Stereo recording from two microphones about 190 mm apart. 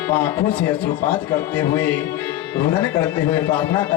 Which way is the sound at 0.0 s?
10° left (ahead or behind).